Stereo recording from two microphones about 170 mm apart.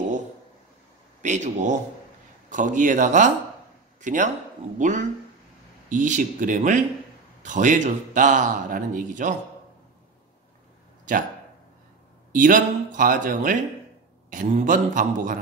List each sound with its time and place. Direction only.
1.2 s speech: 45° right (ahead or behind)
11.1 s speech: 50° right (ahead or behind)
12.3 s speech: 50° right (ahead or behind)